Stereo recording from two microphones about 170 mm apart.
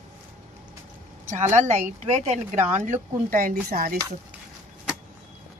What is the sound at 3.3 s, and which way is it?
Speech, 55° right (ahead or behind).